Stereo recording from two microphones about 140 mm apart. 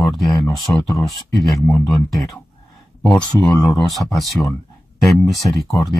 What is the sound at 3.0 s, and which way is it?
Speech, 5° left (ahead or behind).